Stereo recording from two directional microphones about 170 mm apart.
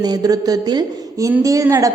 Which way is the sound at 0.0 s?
25° right (ahead or behind).